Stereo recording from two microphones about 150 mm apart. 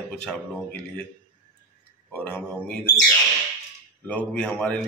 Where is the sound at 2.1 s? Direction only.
10° left (ahead or behind).